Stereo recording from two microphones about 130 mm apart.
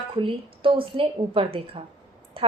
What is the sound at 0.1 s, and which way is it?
A woman's voice, 40° right (ahead or behind).